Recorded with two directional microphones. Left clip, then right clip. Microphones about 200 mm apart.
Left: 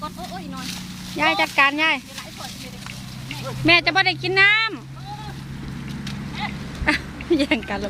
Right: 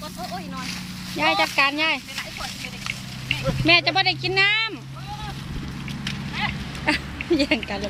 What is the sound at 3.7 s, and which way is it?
Speech, 10° left (ahead or behind).